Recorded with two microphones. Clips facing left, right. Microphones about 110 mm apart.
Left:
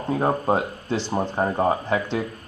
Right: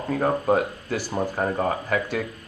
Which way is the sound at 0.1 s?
25° left (ahead or behind).